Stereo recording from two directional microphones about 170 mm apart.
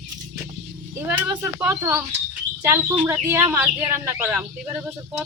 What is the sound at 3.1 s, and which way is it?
Speech, 15° right (ahead or behind).